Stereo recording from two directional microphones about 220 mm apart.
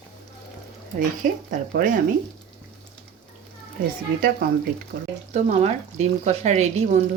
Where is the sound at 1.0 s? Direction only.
40° right (ahead or behind).